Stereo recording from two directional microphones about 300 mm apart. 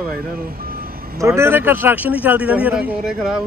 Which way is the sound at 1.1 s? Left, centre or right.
Centre.